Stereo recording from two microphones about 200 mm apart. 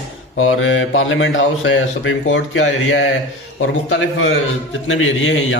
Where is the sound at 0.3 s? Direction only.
80° left.